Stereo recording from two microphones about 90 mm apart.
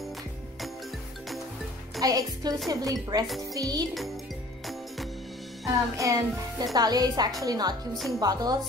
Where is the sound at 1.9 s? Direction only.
40° right (ahead or behind).